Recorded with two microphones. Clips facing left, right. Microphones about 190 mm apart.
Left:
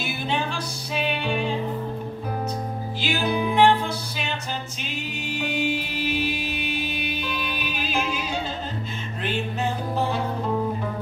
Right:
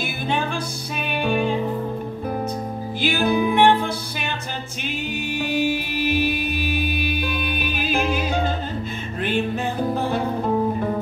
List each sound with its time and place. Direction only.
0.9 s music: 50° right (ahead or behind)
3.0 s music: 55° right (ahead or behind)
5.3 s music: 50° right (ahead or behind)
9.9 s music: 55° right (ahead or behind)